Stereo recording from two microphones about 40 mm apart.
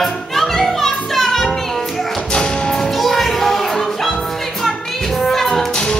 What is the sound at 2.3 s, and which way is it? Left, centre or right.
Music, left.